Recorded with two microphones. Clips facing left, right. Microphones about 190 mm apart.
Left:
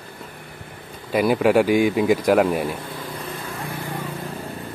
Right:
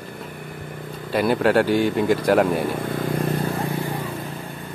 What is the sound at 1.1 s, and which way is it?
Speech, 5° left (ahead or behind).